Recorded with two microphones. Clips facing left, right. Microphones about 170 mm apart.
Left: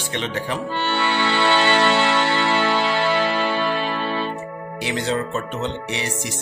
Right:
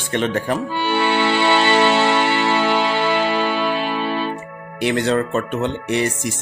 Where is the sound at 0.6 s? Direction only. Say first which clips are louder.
Right 3 dB; 10° right (ahead or behind).